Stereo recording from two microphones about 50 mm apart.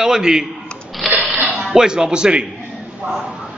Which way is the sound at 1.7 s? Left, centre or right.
Centre.